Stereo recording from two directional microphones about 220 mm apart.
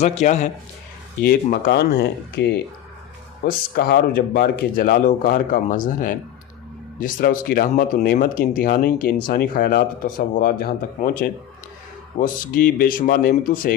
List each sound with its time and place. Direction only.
0.0 s speech: 30° left (ahead or behind)
1.2 s speech: 45° left (ahead or behind)